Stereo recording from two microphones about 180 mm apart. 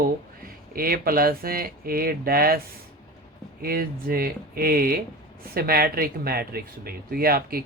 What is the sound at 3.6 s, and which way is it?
Speech, 55° right (ahead or behind).